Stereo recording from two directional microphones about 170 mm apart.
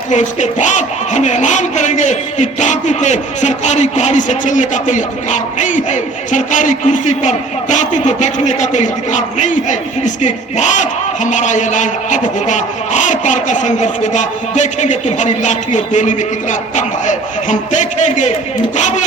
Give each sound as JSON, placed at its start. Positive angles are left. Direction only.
{"t": 0.1, "sound": "a man's voice", "side_deg": 45}